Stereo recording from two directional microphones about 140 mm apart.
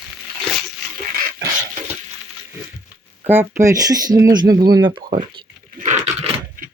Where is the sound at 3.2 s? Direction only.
15° right (ahead or behind).